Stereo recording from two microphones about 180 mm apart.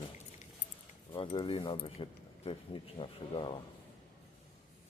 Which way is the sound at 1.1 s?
25° left (ahead or behind).